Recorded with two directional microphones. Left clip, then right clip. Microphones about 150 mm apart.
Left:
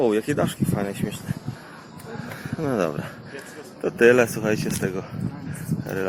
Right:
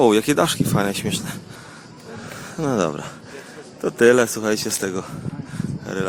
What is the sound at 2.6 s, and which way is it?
Speech, 35° right (ahead or behind).